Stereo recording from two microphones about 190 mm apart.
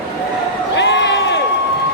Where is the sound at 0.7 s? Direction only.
65° left (ahead or behind).